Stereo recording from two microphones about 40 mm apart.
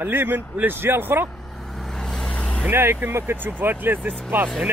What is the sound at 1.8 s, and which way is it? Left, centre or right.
Vehicle, centre.